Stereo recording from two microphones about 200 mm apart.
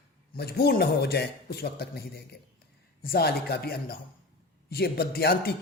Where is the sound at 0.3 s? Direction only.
50° left (ahead or behind).